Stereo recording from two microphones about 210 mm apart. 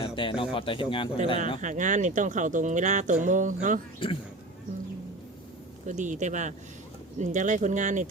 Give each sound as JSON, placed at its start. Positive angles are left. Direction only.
{"t": 0.0, "sound": "speech", "side_deg": 25}
{"t": 1.6, "sound": "speech", "side_deg": -35}
{"t": 4.0, "sound": "speech", "side_deg": 25}
{"t": 5.8, "sound": "speech", "side_deg": -35}